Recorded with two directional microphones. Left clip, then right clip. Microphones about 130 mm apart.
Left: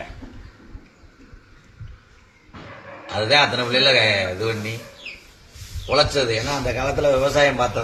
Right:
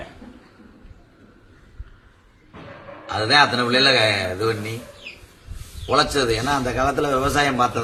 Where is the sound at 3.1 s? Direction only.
30° right (ahead or behind).